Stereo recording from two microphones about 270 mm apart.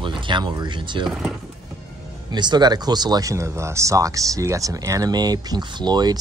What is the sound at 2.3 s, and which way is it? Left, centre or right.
Speech, centre.